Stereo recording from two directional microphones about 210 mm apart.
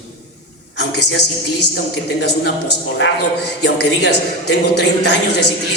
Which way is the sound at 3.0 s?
55° left (ahead or behind).